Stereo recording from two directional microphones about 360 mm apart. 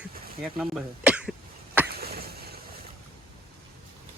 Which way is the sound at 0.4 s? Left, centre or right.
Centre.